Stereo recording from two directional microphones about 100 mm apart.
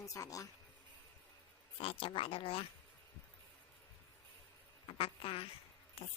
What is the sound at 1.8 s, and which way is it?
Speech, 65° left (ahead or behind).